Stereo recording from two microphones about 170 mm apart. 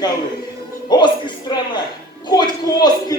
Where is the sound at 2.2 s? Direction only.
25° left (ahead or behind).